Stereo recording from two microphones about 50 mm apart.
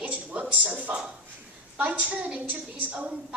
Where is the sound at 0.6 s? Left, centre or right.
Right.